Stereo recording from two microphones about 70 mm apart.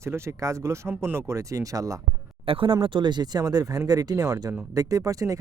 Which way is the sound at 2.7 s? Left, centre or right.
Right.